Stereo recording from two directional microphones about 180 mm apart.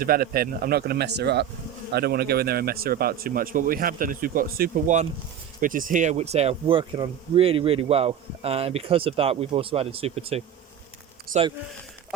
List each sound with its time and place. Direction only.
0.0 s speech: 55° right (ahead or behind); by 10.4 s 35° right (ahead or behind)
11.3 s a man's voice: 50° right (ahead or behind)